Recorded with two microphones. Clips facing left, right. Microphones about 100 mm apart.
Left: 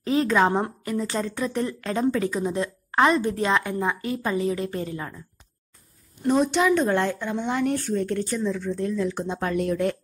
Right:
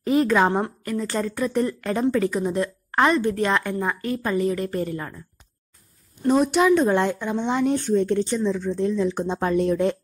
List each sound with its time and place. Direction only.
0.0 s speech: 10° right (ahead or behind)
0.8 s speech: 5° left (ahead or behind)
4.0 s a woman's voice: 15° left (ahead or behind)
4.3 s speech: 5° left (ahead or behind)
6.2 s speech: 10° right (ahead or behind)